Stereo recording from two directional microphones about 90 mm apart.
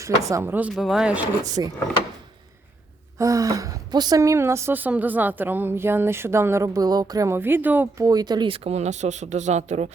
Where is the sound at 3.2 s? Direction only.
40° right (ahead or behind).